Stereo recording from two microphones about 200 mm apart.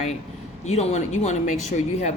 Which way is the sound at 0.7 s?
35° left (ahead or behind).